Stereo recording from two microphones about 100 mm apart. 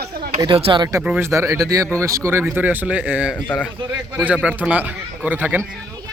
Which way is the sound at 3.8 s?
55° right (ahead or behind).